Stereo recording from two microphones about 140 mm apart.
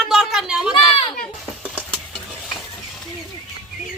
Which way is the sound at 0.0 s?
5° right (ahead or behind).